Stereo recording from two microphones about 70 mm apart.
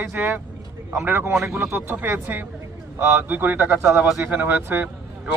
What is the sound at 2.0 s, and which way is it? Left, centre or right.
Speech, right.